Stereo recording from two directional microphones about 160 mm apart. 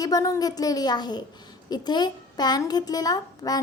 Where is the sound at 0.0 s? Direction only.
20° left (ahead or behind).